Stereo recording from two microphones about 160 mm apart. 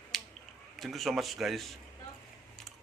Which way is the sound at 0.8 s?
Centre (ahead or behind).